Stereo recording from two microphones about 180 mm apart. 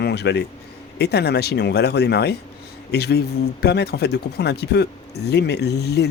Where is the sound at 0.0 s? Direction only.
70° left (ahead or behind).